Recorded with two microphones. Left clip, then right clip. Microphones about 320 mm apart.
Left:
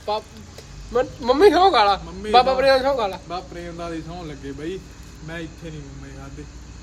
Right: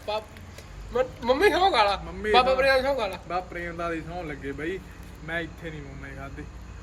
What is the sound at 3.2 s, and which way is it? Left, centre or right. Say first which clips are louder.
Speech: even; centre.